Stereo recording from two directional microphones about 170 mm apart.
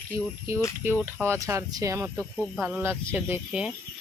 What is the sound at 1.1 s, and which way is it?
Speech, 15° right (ahead or behind).